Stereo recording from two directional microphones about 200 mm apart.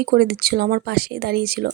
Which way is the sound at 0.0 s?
50° right (ahead or behind).